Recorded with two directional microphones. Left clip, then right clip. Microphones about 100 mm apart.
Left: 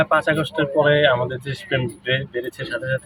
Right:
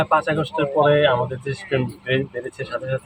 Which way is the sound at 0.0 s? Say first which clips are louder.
Left 1 dB; centre (ahead or behind).